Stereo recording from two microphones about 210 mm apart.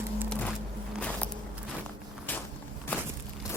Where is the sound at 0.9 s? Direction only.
5° left (ahead or behind).